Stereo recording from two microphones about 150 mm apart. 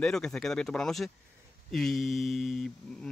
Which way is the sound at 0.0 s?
5° left (ahead or behind).